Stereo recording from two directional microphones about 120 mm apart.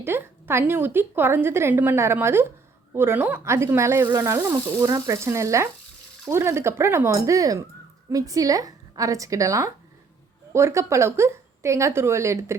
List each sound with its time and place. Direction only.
0.0 s speech: 20° right (ahead or behind)